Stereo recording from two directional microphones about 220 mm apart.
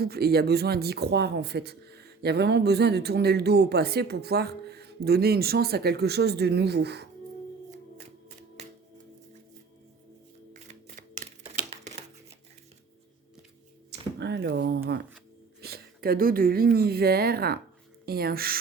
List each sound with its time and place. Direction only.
0.0 s speech: 45° right (ahead or behind)
10.5 s camera: 30° right (ahead or behind)
13.9 s a sound: 50° right (ahead or behind)
15.6 s speech: 45° right (ahead or behind)